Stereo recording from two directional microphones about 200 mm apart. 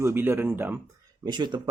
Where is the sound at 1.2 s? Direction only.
20° right (ahead or behind).